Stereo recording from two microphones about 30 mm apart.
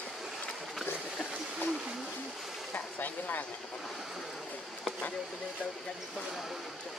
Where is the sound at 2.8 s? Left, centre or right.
Left.